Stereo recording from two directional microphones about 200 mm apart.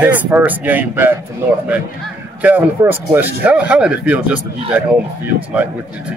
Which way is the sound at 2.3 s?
10° right (ahead or behind).